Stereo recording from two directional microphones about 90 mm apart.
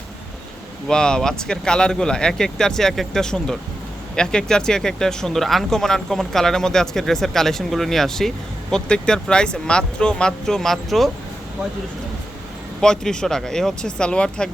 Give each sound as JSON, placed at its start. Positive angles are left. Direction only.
{"t": 0.9, "sound": "speech", "side_deg": 10}
{"t": 12.8, "sound": "speech", "side_deg": 5}